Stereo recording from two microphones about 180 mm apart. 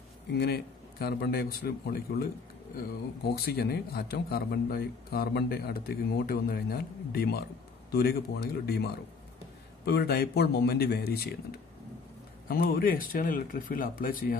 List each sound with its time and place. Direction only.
0.3 s speech: 65° left (ahead or behind)
3.3 s speech: 60° left (ahead or behind)